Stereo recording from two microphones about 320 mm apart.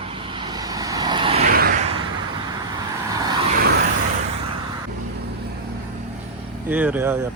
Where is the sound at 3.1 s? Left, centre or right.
Centre.